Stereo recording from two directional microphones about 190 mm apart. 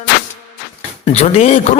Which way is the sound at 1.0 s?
30° left (ahead or behind).